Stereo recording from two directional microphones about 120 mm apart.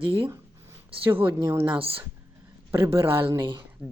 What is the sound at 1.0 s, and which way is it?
Speech, 15° right (ahead or behind).